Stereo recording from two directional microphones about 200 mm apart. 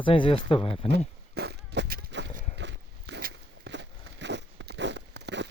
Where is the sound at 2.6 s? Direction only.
60° right (ahead or behind).